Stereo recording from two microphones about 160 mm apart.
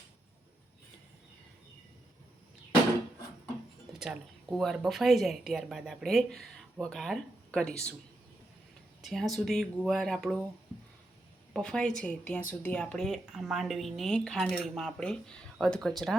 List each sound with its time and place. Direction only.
3.9 s a woman's voice: 5° right (ahead or behind)
9.0 s a woman's voice: centre (ahead or behind)
11.5 s a woman's voice: 5° left (ahead or behind)